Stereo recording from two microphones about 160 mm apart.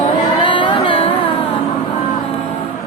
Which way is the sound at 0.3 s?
30° left (ahead or behind).